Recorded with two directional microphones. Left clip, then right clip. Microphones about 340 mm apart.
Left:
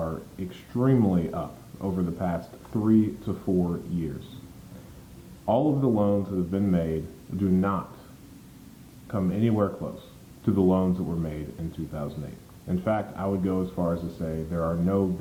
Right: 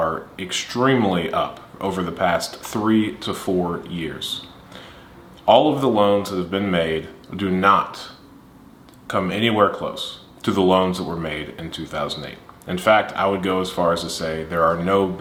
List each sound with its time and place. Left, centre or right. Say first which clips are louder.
0.0 s speech: right 10 dB; centre
6.0 s speech: right 8 dB; centre
9.0 s speech: right 8 dB; centre
10.9 s speech: right 6 dB; centre
11.2 s speech: right 8 dB; centre